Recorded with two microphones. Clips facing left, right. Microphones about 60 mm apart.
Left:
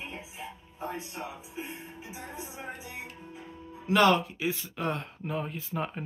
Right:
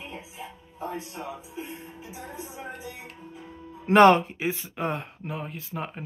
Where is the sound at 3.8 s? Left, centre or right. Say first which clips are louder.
Right 7 dB; right.